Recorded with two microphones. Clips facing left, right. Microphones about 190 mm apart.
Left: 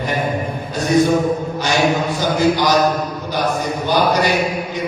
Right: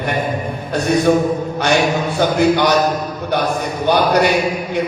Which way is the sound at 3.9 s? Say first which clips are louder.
Right 3 dB; 60° right (ahead or behind).